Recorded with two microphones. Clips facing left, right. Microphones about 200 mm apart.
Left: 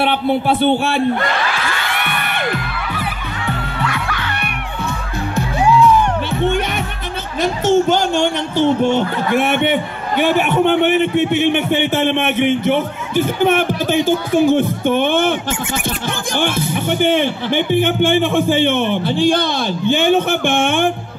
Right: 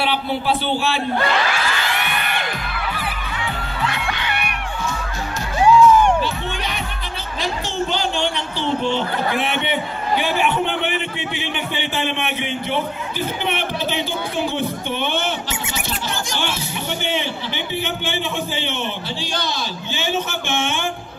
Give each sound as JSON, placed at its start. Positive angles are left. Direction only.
{"t": 0.0, "sound": "a man's voice", "side_deg": 55}
{"t": 3.9, "sound": "crowd", "side_deg": -20}
{"t": 7.4, "sound": "speech", "side_deg": 45}
{"t": 16.3, "sound": "speech", "side_deg": 50}